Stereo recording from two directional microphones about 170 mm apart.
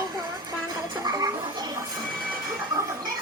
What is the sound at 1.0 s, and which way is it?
Music, 25° right (ahead or behind).